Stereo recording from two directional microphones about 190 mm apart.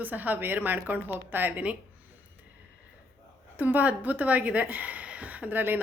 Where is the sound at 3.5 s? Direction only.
10° right (ahead or behind).